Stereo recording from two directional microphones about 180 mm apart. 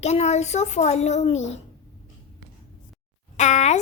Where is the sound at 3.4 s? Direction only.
40° left (ahead or behind).